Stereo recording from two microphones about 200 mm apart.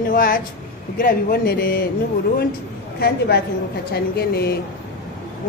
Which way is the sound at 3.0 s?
55° left (ahead or behind).